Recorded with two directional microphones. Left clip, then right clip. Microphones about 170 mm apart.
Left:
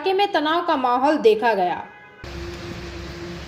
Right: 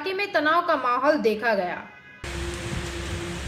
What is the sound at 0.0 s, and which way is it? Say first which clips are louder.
A woman's voice: left 4 dB; 20° left (ahead or behind).